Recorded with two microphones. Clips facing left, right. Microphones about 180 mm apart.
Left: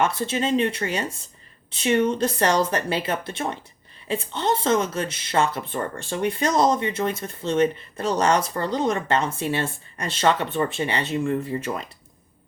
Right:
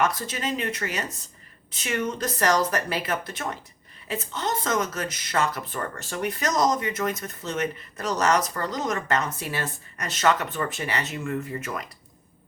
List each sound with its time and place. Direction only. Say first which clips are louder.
0.0 s speech: left 3 dB; 30° left (ahead or behind)